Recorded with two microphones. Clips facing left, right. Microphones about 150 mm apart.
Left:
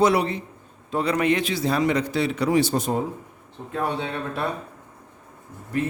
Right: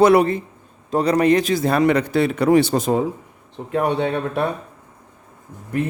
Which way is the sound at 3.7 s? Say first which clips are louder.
Right 7 dB; 70° right (ahead or behind).